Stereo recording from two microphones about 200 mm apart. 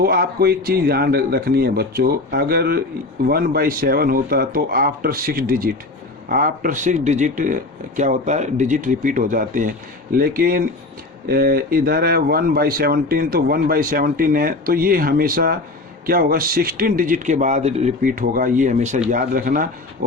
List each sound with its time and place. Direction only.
0.0 s speech: 50° right (ahead or behind)